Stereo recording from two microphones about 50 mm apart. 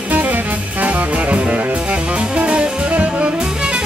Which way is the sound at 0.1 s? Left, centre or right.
Right.